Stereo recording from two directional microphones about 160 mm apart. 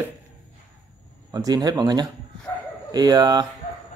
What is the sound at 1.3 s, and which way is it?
Speech, 25° right (ahead or behind).